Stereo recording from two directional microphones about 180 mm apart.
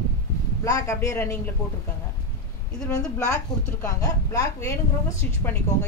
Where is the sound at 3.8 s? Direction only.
20° left (ahead or behind).